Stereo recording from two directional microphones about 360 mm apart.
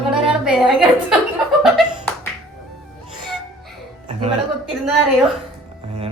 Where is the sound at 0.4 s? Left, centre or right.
Centre.